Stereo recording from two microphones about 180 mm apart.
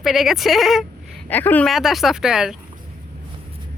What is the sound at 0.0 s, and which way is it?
Speech, centre (ahead or behind).